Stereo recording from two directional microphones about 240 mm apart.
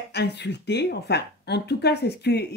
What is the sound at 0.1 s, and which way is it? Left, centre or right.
Speech, left.